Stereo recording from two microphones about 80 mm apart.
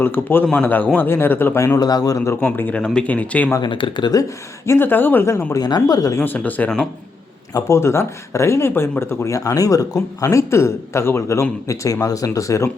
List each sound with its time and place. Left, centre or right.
0.0 s speech: left
1.5 s speech: left
1.8 s speech: left
2.1 s speech: left
2.8 s speech: centre
3.6 s speech: left
4.6 s speech: left
5.6 s speech: left
6.1 s speech: left
7.5 s speech: left